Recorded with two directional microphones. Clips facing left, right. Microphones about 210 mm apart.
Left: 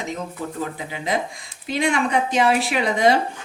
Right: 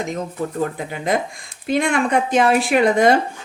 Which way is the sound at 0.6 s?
50° right (ahead or behind).